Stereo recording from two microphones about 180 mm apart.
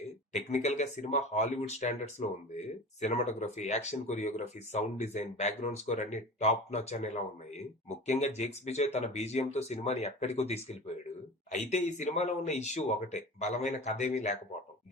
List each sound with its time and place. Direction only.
0.3 s speech: 40° left (ahead or behind)